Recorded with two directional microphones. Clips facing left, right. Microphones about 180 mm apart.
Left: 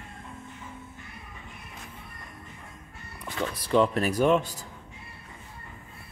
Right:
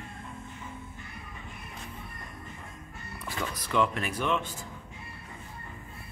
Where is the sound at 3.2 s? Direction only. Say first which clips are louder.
Left 4 dB; 30° left (ahead or behind).